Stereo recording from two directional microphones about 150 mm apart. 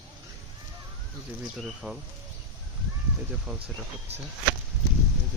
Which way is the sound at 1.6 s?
Centre (ahead or behind).